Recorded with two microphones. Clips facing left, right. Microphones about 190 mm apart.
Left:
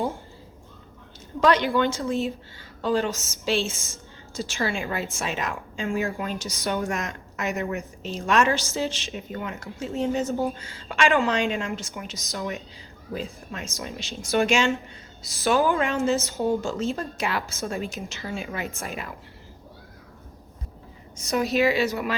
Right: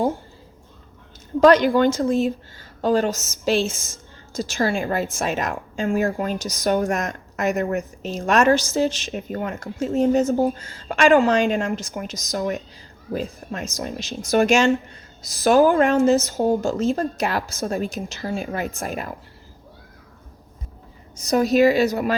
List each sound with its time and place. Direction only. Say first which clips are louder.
1.4 s a woman's voice: right 6 dB; 45° right (ahead or behind)
4.7 s speech: right 6 dB; 50° right (ahead or behind)
18.4 s speech: right 5 dB; 50° right (ahead or behind)
21.2 s speech: right 6 dB; 40° right (ahead or behind)